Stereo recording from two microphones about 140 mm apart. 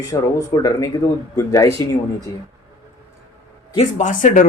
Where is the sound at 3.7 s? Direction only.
65° left (ahead or behind).